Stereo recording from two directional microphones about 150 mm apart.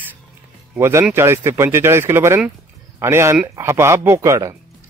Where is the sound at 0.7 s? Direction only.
20° right (ahead or behind).